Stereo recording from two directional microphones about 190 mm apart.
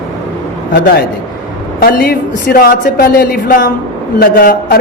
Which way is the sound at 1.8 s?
50° left (ahead or behind).